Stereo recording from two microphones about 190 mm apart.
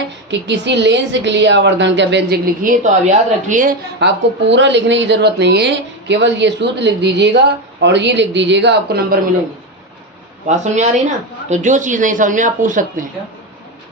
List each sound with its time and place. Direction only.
0.3 s a woman's voice: 65° right (ahead or behind)
2.6 s speech: 40° right (ahead or behind)
4.0 s a woman's voice: 70° right (ahead or behind)
10.4 s speech: 40° right (ahead or behind)